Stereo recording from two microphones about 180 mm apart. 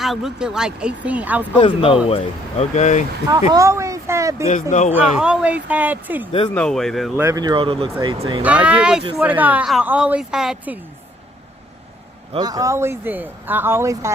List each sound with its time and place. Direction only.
0.0 s speech: centre (ahead or behind)
1.5 s speech: 25° left (ahead or behind)
3.2 s speech: 20° right (ahead or behind)
4.7 s speech: 40° left (ahead or behind)
4.9 s speech: 5° right (ahead or behind)
6.5 s speech: 5° left (ahead or behind)
7.2 s speech: 20° right (ahead or behind)
8.4 s speech: 5° right (ahead or behind)
12.3 s speech: 20° right (ahead or behind)